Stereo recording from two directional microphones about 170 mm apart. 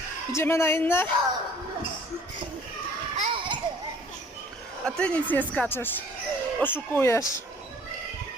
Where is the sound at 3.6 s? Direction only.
25° right (ahead or behind).